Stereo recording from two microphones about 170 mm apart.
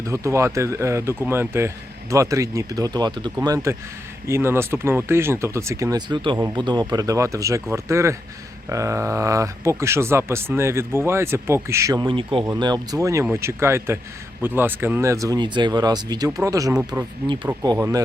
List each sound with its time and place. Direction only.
0.1 s speech: 15° right (ahead or behind)
16.7 s speech: 10° right (ahead or behind)